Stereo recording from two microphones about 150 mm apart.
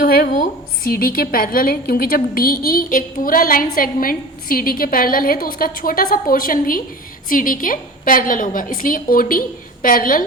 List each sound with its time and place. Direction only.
0.0 s a woman's voice: 90° left; by 10.2 s 70° left (ahead or behind)